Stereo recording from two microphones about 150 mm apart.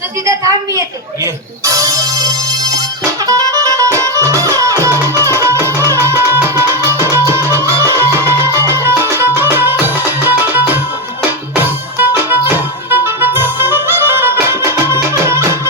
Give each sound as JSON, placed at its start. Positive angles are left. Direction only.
{"t": 0.3, "sound": "music", "side_deg": -20}